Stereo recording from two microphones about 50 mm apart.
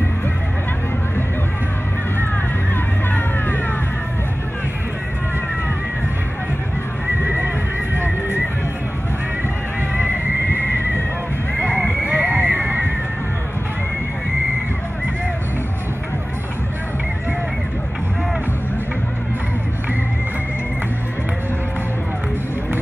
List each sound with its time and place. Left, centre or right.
3.1 s music: left
7.2 s neigh: right
9.8 s neigh: right
12.0 s a sound: right